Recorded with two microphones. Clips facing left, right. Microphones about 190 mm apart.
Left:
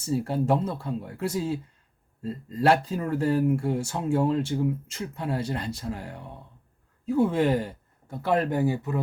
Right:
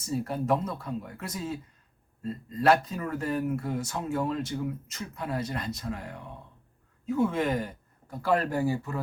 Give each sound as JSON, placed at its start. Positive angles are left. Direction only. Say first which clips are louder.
{"t": 0.0, "sound": "speech", "louder": "left 4 dB", "side_deg": 30}